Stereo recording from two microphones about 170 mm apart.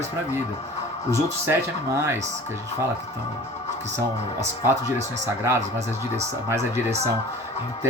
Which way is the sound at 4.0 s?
15° right (ahead or behind).